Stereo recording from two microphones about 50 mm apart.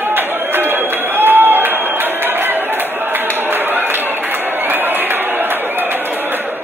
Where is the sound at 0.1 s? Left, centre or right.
Right.